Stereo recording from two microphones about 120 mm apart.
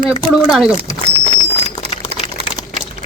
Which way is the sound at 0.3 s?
5° right (ahead or behind).